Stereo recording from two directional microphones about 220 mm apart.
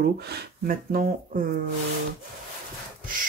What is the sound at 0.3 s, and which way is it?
Speech, 40° right (ahead or behind).